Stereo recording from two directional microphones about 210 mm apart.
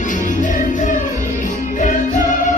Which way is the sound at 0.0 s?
35° left (ahead or behind).